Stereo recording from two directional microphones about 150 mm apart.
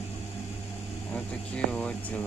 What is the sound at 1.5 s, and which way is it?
Speech, 5° left (ahead or behind).